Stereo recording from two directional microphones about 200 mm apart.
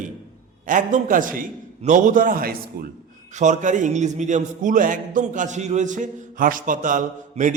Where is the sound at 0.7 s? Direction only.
40° right (ahead or behind).